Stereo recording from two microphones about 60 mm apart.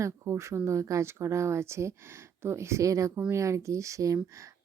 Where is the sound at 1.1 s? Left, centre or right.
Right.